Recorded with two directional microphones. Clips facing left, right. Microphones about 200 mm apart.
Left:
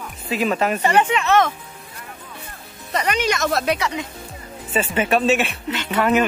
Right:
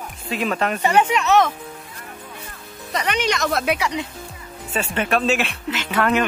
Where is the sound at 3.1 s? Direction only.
Centre (ahead or behind).